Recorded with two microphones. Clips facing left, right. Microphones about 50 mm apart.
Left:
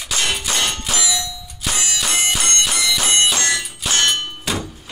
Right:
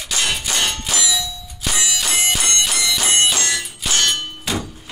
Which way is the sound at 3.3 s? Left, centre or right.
Left.